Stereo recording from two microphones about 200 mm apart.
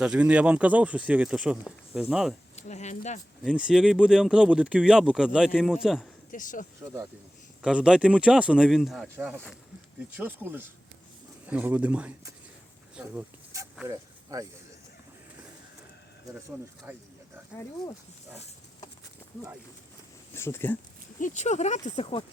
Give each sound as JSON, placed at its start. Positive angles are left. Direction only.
{"t": 0.0, "sound": "speech", "side_deg": -5}
{"t": 2.6, "sound": "speech", "side_deg": 35}
{"t": 3.4, "sound": "speech", "side_deg": -5}
{"t": 6.3, "sound": "speech", "side_deg": 40}
{"t": 7.6, "sound": "speech", "side_deg": -5}
{"t": 10.2, "sound": "speech", "side_deg": -10}
{"t": 16.9, "sound": "speech", "side_deg": -10}
{"t": 20.3, "sound": "speech", "side_deg": 10}
{"t": 21.2, "sound": "speech", "side_deg": 40}